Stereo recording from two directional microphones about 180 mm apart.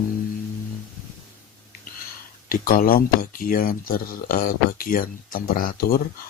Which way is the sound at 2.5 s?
55° left (ahead or behind).